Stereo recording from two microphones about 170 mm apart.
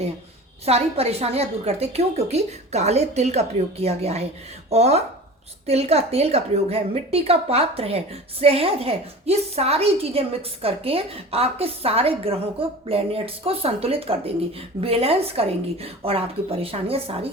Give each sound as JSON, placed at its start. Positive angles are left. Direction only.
{"t": 0.6, "sound": "a woman's voice", "side_deg": -40}